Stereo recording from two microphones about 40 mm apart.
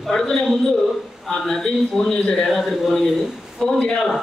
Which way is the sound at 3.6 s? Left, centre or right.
Centre.